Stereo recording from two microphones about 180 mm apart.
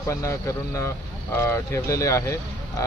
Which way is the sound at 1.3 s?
15° left (ahead or behind).